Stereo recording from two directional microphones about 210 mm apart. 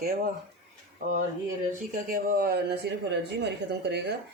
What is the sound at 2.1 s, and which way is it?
Speech, 45° right (ahead or behind).